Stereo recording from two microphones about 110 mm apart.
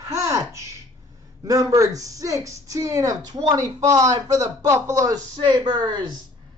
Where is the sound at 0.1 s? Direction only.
30° right (ahead or behind).